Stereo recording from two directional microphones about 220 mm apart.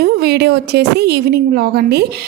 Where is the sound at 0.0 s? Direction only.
45° right (ahead or behind).